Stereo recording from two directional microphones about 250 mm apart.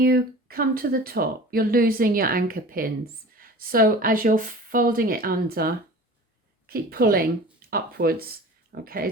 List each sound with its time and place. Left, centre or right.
0.0 s speech: right